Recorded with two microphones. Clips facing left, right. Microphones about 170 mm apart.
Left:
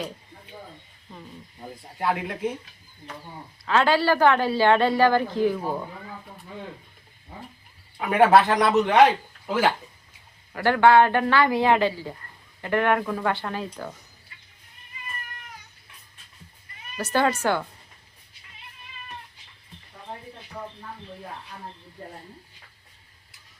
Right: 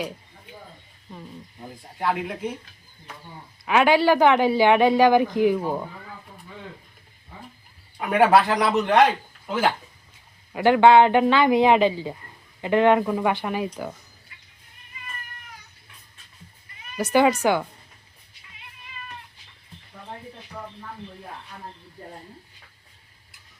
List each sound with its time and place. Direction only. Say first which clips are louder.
2.0 s speech: even; centre (ahead or behind)
3.7 s speech: right 3 dB; 15° right (ahead or behind)
7.9 s speech: even; centre (ahead or behind)
10.5 s speech: right 3 dB; 15° right (ahead or behind)
17.0 s speech: right 4 dB; 15° right (ahead or behind)